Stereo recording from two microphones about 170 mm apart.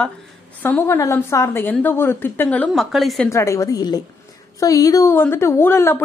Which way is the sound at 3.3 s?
15° left (ahead or behind).